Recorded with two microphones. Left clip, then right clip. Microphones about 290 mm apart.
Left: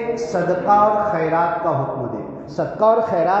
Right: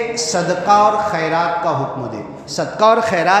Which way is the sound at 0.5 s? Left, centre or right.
Right.